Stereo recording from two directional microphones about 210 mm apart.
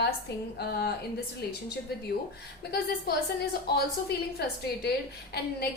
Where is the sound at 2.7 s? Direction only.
50° left (ahead or behind).